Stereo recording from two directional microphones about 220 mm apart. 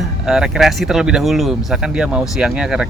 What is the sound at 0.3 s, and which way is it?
Speech, centre (ahead or behind).